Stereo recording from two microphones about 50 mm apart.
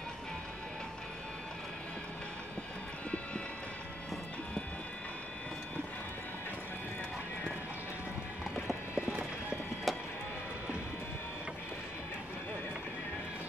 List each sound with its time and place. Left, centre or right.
9.0 s clip-clop: right
9.9 s vehicle: centre